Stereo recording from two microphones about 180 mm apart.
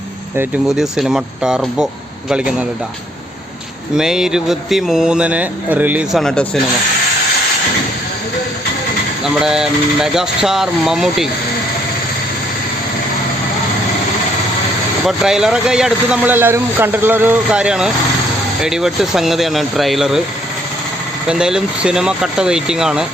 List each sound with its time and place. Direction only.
0.8 s speech: centre (ahead or behind)
3.9 s speech: 5° right (ahead or behind)
9.2 s speech: 5° right (ahead or behind)
15.0 s speech: centre (ahead or behind)
21.2 s speech: 5° right (ahead or behind)